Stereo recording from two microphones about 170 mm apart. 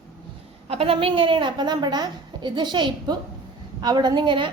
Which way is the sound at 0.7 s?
35° right (ahead or behind).